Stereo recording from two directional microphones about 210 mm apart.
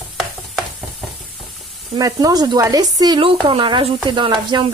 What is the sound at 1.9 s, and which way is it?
Speech, 20° right (ahead or behind).